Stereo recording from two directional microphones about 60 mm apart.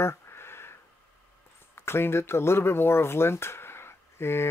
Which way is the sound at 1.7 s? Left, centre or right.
Left.